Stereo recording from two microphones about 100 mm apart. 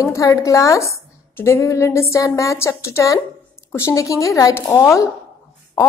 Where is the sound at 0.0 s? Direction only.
35° left (ahead or behind).